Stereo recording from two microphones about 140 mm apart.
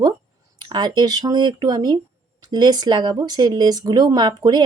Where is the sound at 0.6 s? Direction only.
30° right (ahead or behind).